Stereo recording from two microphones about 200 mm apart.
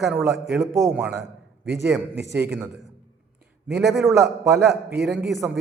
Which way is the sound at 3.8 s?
Centre (ahead or behind).